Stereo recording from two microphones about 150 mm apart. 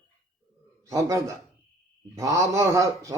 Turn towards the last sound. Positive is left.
turn(degrees=-20)  # may be behind; listen again after turning